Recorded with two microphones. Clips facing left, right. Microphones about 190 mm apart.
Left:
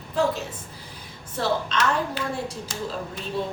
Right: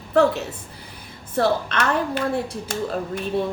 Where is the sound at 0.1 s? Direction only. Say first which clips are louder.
Right 6 dB; 65° right (ahead or behind).